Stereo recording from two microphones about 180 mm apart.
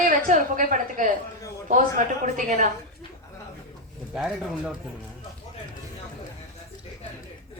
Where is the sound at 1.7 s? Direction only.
45° right (ahead or behind).